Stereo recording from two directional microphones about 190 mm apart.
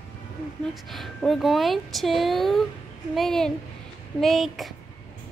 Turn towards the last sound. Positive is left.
turn(degrees=0)  # may be behind; listen again after turning